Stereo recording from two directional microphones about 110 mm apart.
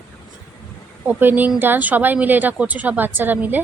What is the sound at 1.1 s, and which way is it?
Speech, 15° right (ahead or behind).